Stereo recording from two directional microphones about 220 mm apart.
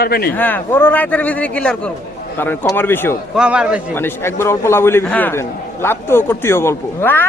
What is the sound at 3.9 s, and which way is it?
A man's voice, 10° left (ahead or behind).